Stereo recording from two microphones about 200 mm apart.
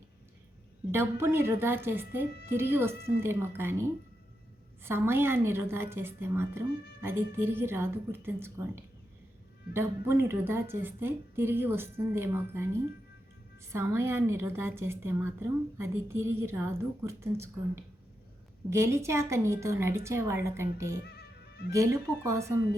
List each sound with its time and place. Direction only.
0.9 s a woman's voice: 10° right (ahead or behind)
13.7 s a woman's voice: 10° right (ahead or behind)
21.0 s music: 50° left (ahead or behind)
21.7 s a woman's voice: 15° right (ahead or behind)